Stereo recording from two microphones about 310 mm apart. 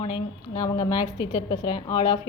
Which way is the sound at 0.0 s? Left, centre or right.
Centre.